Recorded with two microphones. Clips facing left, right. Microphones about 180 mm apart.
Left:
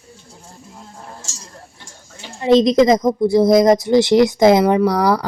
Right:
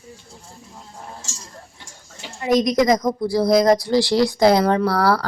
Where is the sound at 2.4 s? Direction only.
25° left (ahead or behind).